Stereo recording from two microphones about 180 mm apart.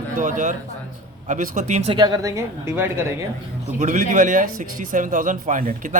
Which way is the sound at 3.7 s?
45° right (ahead or behind).